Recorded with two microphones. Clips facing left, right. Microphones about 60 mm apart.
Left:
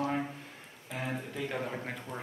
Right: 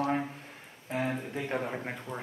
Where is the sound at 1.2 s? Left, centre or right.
Right.